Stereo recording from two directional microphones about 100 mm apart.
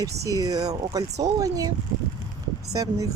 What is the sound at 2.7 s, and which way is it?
Speech, 35° right (ahead or behind).